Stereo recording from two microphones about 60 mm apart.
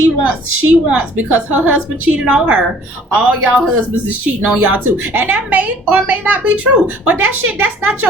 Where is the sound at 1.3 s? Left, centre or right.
Right.